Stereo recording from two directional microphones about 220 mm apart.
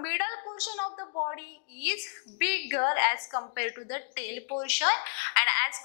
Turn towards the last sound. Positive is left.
turn(degrees=15)  # may be behind; listen again after turning